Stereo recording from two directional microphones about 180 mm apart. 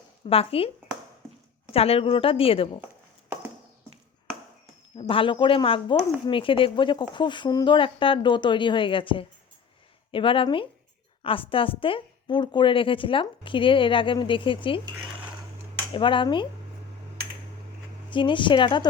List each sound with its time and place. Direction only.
0.3 s a woman's voice: 30° left (ahead or behind)
1.7 s a woman's voice: 35° left (ahead or behind)
4.9 s a woman's voice: 30° left (ahead or behind)
15.9 s a woman's voice: 25° left (ahead or behind)
18.1 s a woman's voice: 25° left (ahead or behind)